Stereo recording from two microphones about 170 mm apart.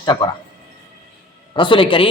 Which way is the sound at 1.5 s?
30° left (ahead or behind).